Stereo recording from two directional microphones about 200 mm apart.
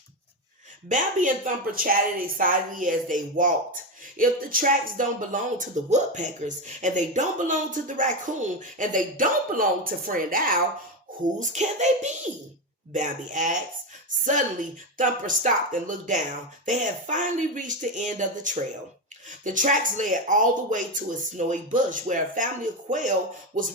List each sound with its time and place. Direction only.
0.9 s speech: 40° right (ahead or behind)